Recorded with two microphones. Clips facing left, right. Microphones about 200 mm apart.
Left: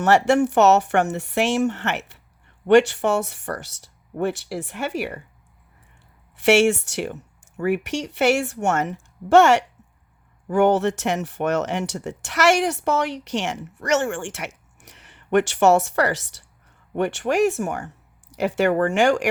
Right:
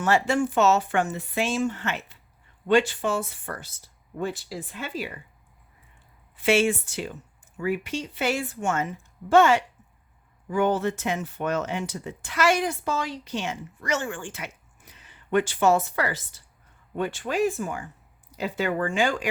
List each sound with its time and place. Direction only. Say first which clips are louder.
0.0 s speech: left 6 dB; 70° left (ahead or behind)
6.3 s speech: left 5 dB; 70° left (ahead or behind)